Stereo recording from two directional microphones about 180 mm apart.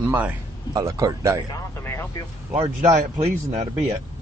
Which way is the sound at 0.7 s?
20° right (ahead or behind).